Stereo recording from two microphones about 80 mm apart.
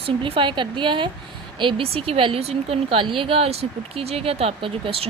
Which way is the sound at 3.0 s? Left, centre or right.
Right.